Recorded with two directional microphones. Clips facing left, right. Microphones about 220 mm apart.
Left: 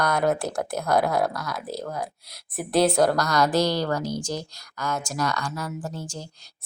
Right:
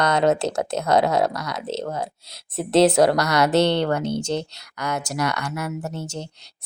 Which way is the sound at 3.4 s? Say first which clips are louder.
Right 4 dB; 65° right (ahead or behind).